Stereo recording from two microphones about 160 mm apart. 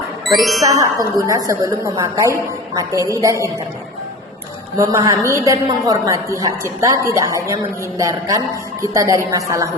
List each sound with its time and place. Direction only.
0.6 s a woman's voice: 20° right (ahead or behind)
4.8 s a woman's voice: 20° right (ahead or behind)